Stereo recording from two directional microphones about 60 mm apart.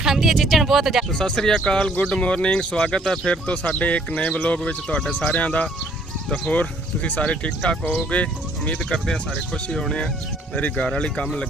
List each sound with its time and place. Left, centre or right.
0.0 s speech: centre
1.2 s speech: centre
8.7 s speech: centre